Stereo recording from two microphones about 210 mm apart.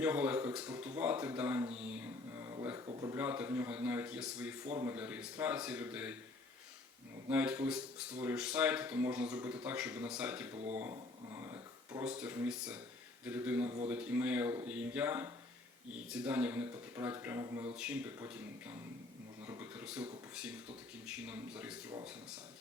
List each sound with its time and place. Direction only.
0.0 s speech: 5° right (ahead or behind)
3.2 s speech: 10° right (ahead or behind)
7.3 s speech: 5° right (ahead or behind)
10.9 s a sound: 15° right (ahead or behind)
12.0 s speech: 5° right (ahead or behind)
19.5 s a sound: 5° right (ahead or behind)
20.3 s speech: 5° right (ahead or behind)